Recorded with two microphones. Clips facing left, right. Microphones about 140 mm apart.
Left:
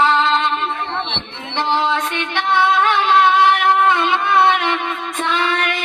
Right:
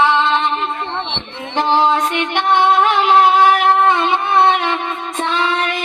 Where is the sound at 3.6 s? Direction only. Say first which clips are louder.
Right 2 dB; 25° right (ahead or behind).